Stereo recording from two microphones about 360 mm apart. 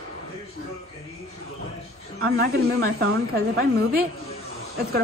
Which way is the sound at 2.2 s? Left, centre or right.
Right.